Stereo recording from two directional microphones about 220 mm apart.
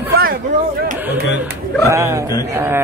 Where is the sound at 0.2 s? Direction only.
40° right (ahead or behind).